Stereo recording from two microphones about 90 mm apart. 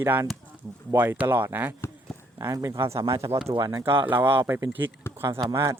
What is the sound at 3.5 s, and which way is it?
Speech, 40° right (ahead or behind).